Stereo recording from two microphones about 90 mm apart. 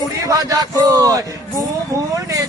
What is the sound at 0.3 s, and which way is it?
A man's voice, 40° right (ahead or behind).